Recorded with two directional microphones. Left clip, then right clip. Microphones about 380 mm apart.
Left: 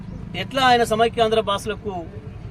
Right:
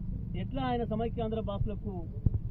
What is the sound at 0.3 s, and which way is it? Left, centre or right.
A man's voice, centre.